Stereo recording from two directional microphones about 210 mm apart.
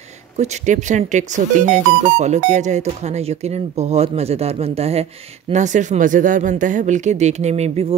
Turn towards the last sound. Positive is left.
turn(degrees=-30)  # may be behind; listen again after turning